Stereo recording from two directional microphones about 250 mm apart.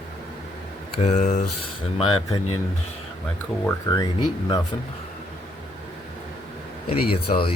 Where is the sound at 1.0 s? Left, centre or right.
Left.